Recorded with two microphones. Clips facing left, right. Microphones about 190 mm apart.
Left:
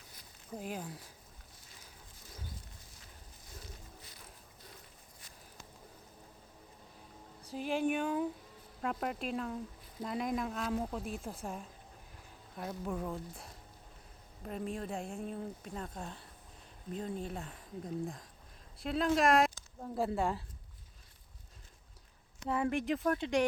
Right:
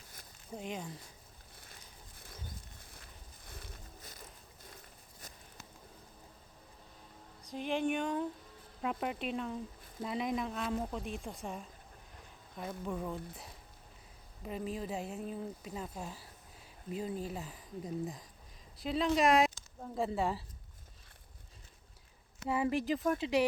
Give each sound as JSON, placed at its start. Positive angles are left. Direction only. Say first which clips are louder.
{"t": 0.5, "sound": "speech", "louder": "even", "side_deg": 5}
{"t": 3.4, "sound": "a sound", "louder": "even", "side_deg": -60}
{"t": 7.5, "sound": "speech", "louder": "left 1 dB", "side_deg": 0}
{"t": 22.4, "sound": "speech", "louder": "right 1 dB", "side_deg": -5}